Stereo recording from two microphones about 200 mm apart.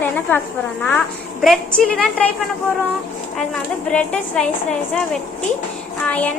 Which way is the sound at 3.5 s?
5° left (ahead or behind).